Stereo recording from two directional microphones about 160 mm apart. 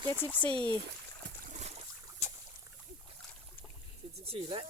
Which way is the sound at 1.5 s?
45° right (ahead or behind).